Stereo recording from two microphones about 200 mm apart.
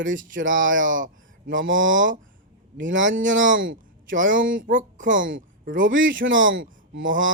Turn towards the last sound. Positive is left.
turn(degrees=-70)  # may be behind; listen again after turning